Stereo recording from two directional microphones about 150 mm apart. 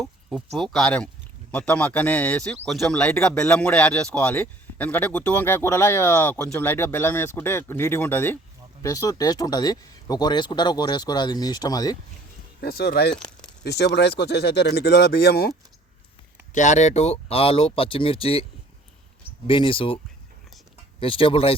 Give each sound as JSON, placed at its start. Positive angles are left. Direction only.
{"t": 0.5, "sound": "speech", "side_deg": 0}
{"t": 12.6, "sound": "speech", "side_deg": 90}
{"t": 13.1, "sound": "a sound", "side_deg": 5}
{"t": 13.7, "sound": "speech", "side_deg": 90}
{"t": 16.6, "sound": "speech", "side_deg": 50}
{"t": 19.5, "sound": "speech", "side_deg": 35}
{"t": 21.0, "sound": "speech", "side_deg": 35}